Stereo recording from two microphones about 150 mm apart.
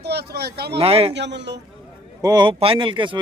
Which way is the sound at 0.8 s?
40° right (ahead or behind).